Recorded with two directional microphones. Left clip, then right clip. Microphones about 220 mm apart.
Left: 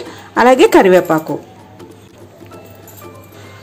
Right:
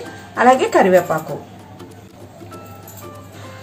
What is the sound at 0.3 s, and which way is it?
Speech, 50° left (ahead or behind).